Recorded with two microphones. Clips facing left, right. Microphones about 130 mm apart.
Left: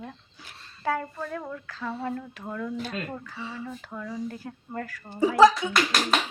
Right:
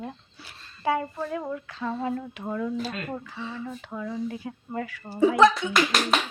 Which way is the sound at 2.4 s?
10° right (ahead or behind).